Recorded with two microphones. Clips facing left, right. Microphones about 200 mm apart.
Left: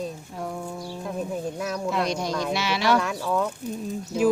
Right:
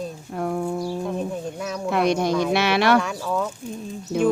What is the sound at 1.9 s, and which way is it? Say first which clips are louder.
Speech: right 8 dB; 60° right (ahead or behind).